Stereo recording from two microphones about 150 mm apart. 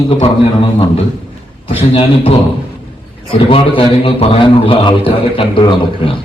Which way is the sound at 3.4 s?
40° left (ahead or behind).